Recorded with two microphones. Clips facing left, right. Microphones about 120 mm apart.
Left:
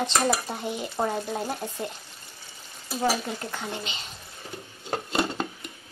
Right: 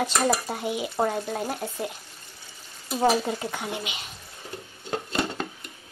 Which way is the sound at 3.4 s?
10° right (ahead or behind).